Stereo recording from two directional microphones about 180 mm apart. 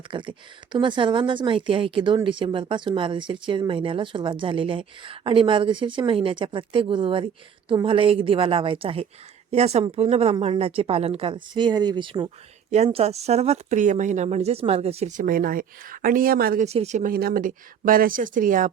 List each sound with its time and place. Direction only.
0.1 s speech: 25° right (ahead or behind); by 16.6 s 55° right (ahead or behind)
16.6 s speech: 40° right (ahead or behind)